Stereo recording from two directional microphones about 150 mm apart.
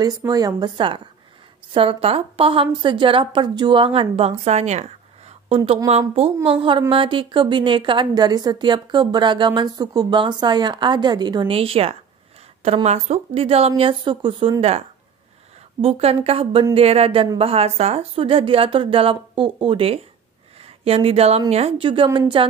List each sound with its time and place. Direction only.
0.0 s a woman's voice: 25° right (ahead or behind)